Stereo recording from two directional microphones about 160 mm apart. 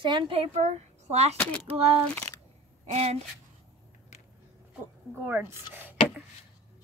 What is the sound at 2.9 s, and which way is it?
Speech, 45° right (ahead or behind).